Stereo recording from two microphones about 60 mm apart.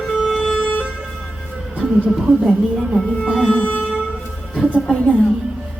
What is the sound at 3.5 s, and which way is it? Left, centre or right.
Music, left.